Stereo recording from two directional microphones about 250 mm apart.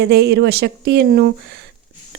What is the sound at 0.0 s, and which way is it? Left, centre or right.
Speech, right.